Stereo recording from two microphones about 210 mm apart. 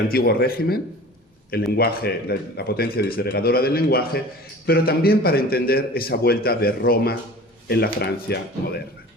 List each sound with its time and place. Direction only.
0.1 s a man's voice: 45° left (ahead or behind)